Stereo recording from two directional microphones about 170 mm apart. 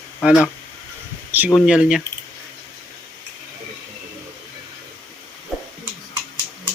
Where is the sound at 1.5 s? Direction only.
Centre (ahead or behind).